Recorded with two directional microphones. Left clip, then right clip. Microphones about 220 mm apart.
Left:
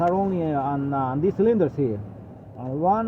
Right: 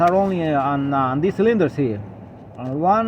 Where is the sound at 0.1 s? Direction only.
35° right (ahead or behind).